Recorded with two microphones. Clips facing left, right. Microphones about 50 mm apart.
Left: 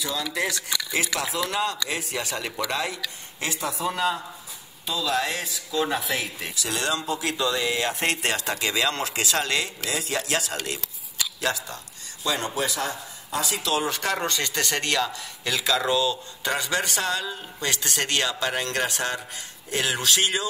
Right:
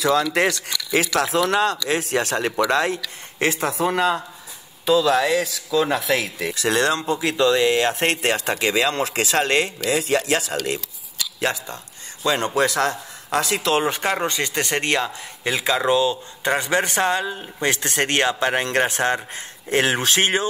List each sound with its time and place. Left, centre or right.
0.0 s speech: right
4.8 s speech: right
6.5 s speech: right
11.4 s speech: right
12.3 s speech: right
12.5 s speech: right
13.8 s speech: right